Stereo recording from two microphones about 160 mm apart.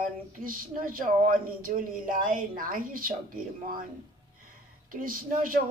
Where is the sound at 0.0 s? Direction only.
60° right (ahead or behind).